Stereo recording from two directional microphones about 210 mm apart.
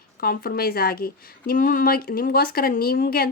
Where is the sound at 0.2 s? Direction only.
45° left (ahead or behind).